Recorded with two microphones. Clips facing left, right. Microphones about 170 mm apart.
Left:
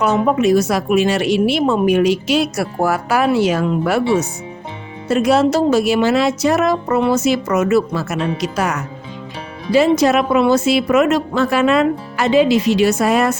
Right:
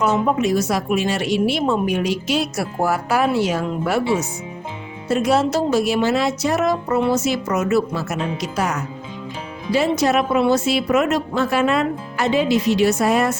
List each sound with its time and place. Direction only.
0.0 s a woman's voice: 65° left (ahead or behind)
9.7 s a woman's voice: 90° left